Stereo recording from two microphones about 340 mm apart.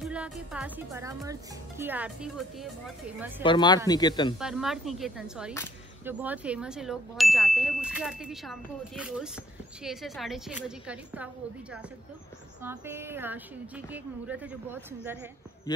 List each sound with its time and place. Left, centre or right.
0.0 s ding: centre
3.4 s speech: centre
4.4 s ding: centre
12.6 s ding: centre